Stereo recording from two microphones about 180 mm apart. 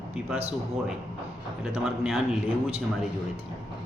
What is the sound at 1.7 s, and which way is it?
Speech, centre (ahead or behind).